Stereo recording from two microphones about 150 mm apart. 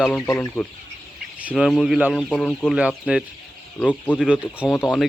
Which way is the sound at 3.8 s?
10° left (ahead or behind).